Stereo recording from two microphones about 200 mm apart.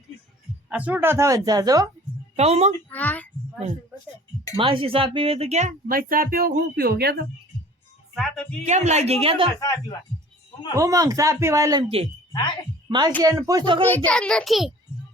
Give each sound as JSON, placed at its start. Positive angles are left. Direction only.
{"t": 0.7, "sound": "speech", "side_deg": -5}
{"t": 2.3, "sound": "speech", "side_deg": -30}
{"t": 2.9, "sound": "a sound", "side_deg": 10}
{"t": 4.5, "sound": "speech", "side_deg": -25}
{"t": 8.1, "sound": "a child's voice", "side_deg": 0}
{"t": 8.6, "sound": "speech", "side_deg": -35}
{"t": 10.8, "sound": "speech", "side_deg": -15}
{"t": 13.8, "sound": "a child's voice", "side_deg": 10}